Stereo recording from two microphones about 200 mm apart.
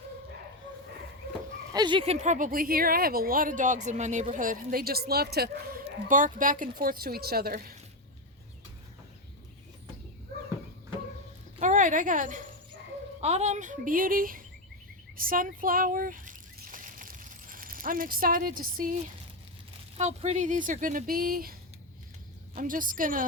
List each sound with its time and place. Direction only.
1.7 s speech: 20° right (ahead or behind); by 7.8 s 50° right (ahead or behind)
11.6 s a woman's voice: 40° right (ahead or behind)
15.1 s a sound: 45° right (ahead or behind)
20.0 s speech: 35° right (ahead or behind)
22.5 s speech: 45° right (ahead or behind)